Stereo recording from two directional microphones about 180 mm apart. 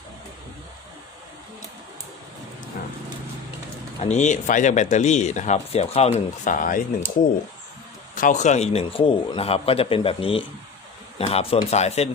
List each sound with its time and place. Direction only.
4.0 s speech: 40° left (ahead or behind)
8.1 s speech: 45° left (ahead or behind)